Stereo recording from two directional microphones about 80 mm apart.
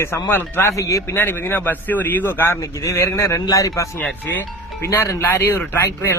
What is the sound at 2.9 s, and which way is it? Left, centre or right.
Speech, left.